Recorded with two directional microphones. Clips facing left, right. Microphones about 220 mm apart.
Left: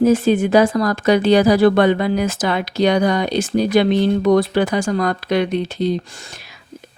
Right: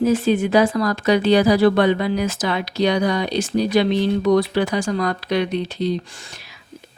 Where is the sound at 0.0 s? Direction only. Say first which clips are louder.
Left 3 dB; 45° left (ahead or behind).